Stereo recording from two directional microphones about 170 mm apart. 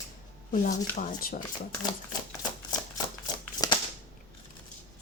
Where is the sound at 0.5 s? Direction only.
45° left (ahead or behind).